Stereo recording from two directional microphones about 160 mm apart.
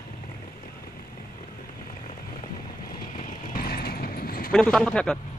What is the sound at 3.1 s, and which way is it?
Vehicle, 50° left (ahead or behind).